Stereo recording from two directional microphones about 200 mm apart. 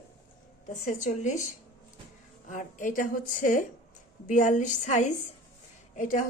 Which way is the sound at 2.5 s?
40° left (ahead or behind).